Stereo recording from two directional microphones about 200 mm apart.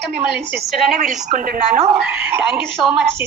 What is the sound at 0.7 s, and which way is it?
Speech, centre (ahead or behind).